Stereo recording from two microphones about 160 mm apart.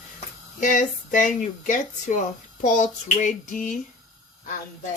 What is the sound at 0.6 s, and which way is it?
Speech, 55° left (ahead or behind).